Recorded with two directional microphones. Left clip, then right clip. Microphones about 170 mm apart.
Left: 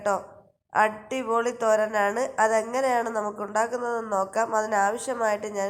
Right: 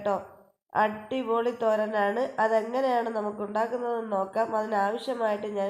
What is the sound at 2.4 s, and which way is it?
Speech, 55° left (ahead or behind).